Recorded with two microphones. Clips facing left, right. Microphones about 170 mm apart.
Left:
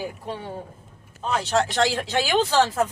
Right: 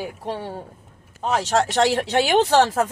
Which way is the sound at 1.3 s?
75° right (ahead or behind).